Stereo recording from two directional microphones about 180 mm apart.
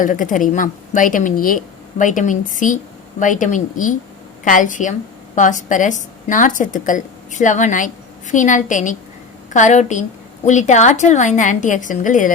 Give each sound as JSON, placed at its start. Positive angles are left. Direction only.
{"t": 0.0, "sound": "a woman's voice", "side_deg": 50}